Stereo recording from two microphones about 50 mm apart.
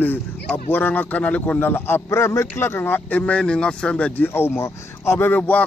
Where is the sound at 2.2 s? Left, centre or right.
Left.